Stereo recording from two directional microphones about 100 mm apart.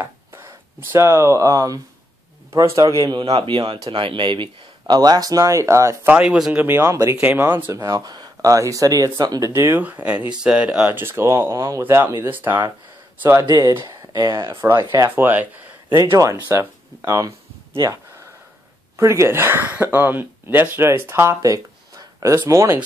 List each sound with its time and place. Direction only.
0.0 s speech: 25° right (ahead or behind)
3.0 s speech: 45° right (ahead or behind)
3.4 s speech: 55° right (ahead or behind); by 5.9 s 30° right (ahead or behind)
6.2 s speech: 5° right (ahead or behind)
6.6 s speech: 20° right (ahead or behind)
6.9 s speech: 30° right (ahead or behind)
7.2 s speech: 15° right (ahead or behind); by 9.5 s 40° right (ahead or behind)
9.5 s speech: 25° right (ahead or behind)
9.8 s speech: 15° right (ahead or behind)
11.0 s speech: 25° right (ahead or behind)
13.5 s speech: 40° right (ahead or behind)
14.5 s speech: 25° right (ahead or behind)
16.5 s speech: 30° right (ahead or behind)
18.9 s speech: 30° right (ahead or behind)